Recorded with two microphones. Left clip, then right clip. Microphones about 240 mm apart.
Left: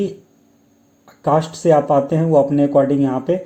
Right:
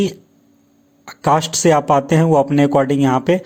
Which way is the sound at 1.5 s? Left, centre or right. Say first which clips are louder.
Right 1 dB; right.